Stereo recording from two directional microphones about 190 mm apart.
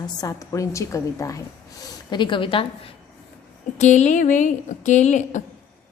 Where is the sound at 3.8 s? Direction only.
40° left (ahead or behind).